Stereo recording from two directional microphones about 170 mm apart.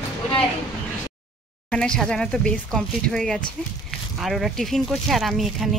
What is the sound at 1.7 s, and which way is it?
Speech, 5° left (ahead or behind).